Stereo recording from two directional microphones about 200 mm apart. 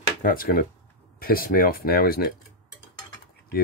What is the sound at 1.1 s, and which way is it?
Speech, 45° left (ahead or behind).